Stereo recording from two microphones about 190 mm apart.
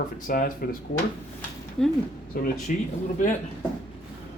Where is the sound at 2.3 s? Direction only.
50° left (ahead or behind).